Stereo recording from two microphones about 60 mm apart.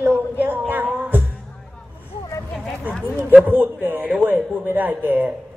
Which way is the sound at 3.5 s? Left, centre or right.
Right.